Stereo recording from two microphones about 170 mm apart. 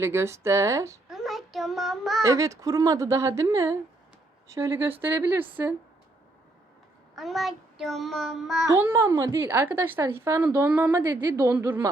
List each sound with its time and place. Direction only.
0.0 s a woman's voice: 15° right (ahead or behind)
1.1 s child singing: centre (ahead or behind)
2.2 s a woman's voice: 20° right (ahead or behind)
7.2 s child singing: centre (ahead or behind)
8.8 s a woman's voice: 15° right (ahead or behind)